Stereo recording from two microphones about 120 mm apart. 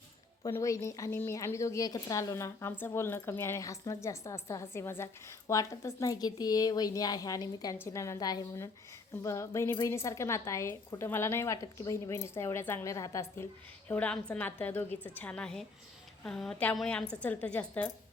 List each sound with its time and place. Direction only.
0.4 s a woman's voice: 25° left (ahead or behind); by 17.9 s 10° left (ahead or behind)